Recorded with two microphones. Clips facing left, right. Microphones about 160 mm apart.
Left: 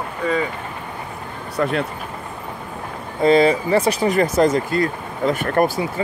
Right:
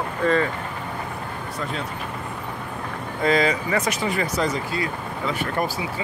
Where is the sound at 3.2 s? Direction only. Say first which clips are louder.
Left 6 dB; 30° left (ahead or behind).